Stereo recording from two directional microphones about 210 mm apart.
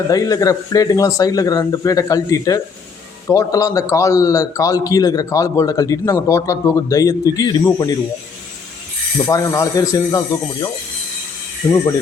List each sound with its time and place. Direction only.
0.1 s a man's voice: 15° left (ahead or behind)
9.1 s a man's voice: 15° left (ahead or behind)